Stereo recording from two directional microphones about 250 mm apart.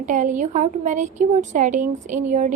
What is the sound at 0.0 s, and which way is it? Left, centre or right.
A woman's voice, right.